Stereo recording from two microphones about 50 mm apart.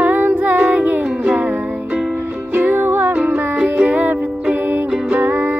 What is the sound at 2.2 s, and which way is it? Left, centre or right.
Music, right.